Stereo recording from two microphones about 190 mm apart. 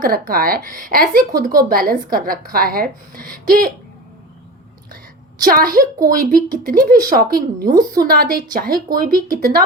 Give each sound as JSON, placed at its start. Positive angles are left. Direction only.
{"t": 0.0, "sound": "speech", "side_deg": -50}
{"t": 5.4, "sound": "speech", "side_deg": -45}